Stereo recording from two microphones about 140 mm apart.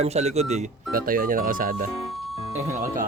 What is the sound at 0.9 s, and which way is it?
Speech, 90° right.